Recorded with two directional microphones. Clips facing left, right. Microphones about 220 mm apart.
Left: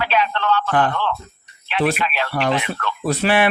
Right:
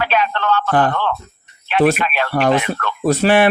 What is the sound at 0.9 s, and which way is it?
Speech, 50° right (ahead or behind).